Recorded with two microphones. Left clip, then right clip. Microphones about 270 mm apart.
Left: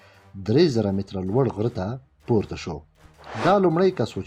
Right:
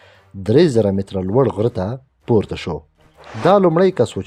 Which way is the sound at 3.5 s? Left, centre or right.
Right.